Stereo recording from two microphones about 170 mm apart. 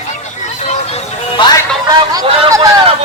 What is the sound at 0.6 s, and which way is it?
Music, 40° left (ahead or behind).